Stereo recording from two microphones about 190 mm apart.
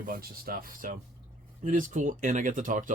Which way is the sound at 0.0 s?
50° right (ahead or behind).